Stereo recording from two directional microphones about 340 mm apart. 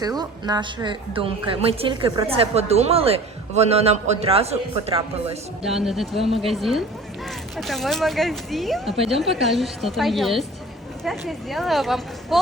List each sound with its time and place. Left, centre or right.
0.2 s a woman's voice: centre
5.6 s speech: centre